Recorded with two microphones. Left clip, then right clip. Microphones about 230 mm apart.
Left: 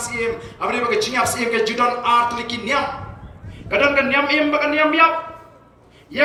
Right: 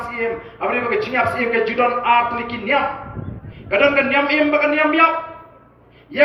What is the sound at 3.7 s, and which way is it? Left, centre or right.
A man's voice, left.